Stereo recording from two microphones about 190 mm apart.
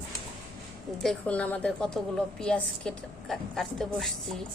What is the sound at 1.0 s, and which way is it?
A woman's voice, 5° left (ahead or behind).